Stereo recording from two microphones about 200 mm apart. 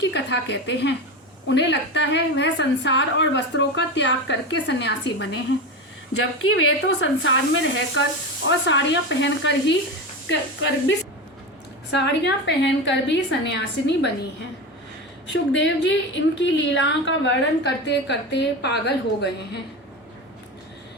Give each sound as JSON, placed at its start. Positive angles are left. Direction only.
{"t": 0.0, "sound": "a woman's voice", "side_deg": 60}
{"t": 6.4, "sound": "a woman's voice", "side_deg": 80}
{"t": 15.3, "sound": "a woman's voice", "side_deg": 65}